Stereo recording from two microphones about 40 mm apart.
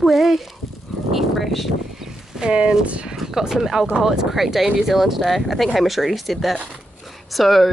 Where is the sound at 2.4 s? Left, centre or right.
Centre.